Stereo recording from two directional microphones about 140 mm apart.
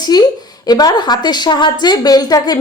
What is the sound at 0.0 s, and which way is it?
A woman's voice, 30° left (ahead or behind).